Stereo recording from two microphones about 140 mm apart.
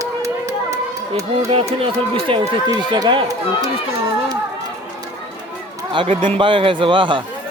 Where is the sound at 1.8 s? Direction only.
40° right (ahead or behind).